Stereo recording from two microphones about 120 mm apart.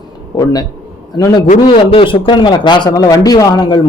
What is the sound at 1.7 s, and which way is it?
A man's voice, 45° left (ahead or behind).